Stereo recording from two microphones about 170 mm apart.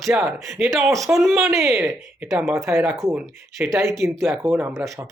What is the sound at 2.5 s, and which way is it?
Speech, 20° right (ahead or behind).